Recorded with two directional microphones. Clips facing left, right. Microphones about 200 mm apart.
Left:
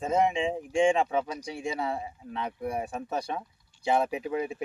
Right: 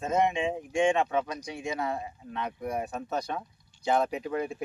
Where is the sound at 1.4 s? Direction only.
30° left (ahead or behind).